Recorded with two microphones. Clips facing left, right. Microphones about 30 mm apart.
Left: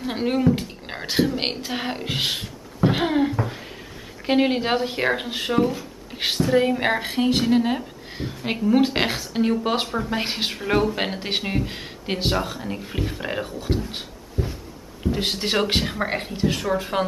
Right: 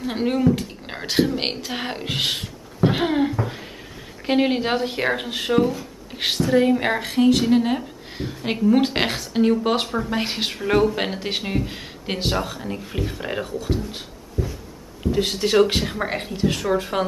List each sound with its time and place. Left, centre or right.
0.0 s a woman's voice: centre
13.5 s speech: left
14.4 s a sound: left
15.1 s a man's voice: centre